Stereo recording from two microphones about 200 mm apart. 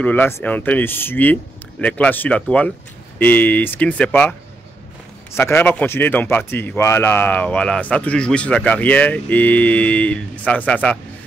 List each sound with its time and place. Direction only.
0.0 s a man's voice: 10° left (ahead or behind)